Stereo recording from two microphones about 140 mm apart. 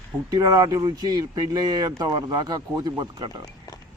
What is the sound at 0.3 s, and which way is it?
A man's voice, 25° right (ahead or behind).